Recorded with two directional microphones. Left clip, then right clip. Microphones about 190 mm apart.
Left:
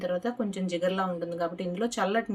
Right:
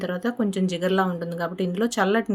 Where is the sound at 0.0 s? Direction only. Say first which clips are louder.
Right 3 dB; 50° right (ahead or behind).